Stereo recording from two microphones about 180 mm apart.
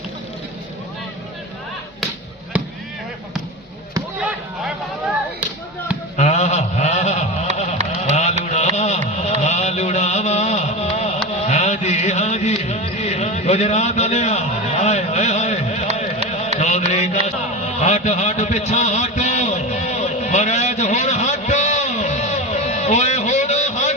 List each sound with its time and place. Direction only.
4.2 s chop: 5° right (ahead or behind)
6.1 s a sound: 40° left (ahead or behind)
8.1 s carnatic music: 40° left (ahead or behind)
9.4 s music: 40° left (ahead or behind)
16.6 s mantra: 40° left (ahead or behind)
17.7 s a sound: 40° left (ahead or behind)